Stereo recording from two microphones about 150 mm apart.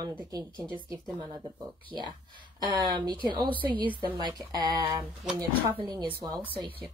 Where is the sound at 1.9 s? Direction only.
30° right (ahead or behind).